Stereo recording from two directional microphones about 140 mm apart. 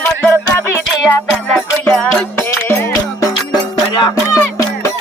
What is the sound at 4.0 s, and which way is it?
Music, 30° left (ahead or behind).